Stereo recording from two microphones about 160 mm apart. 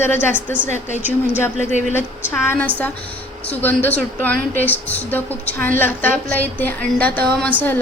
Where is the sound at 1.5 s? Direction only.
50° right (ahead or behind).